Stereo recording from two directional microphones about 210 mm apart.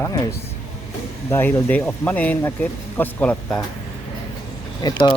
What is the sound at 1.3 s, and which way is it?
Speech, 10° left (ahead or behind).